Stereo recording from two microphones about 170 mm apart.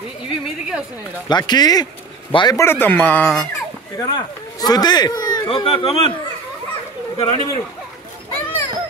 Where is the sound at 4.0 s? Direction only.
25° left (ahead or behind).